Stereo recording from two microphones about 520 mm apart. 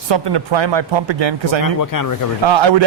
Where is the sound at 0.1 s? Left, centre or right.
Right.